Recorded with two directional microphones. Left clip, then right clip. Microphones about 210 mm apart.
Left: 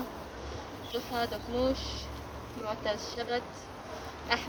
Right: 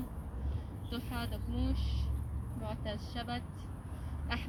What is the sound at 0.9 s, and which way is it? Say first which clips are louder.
Speech: left 9 dB; 35° left (ahead or behind).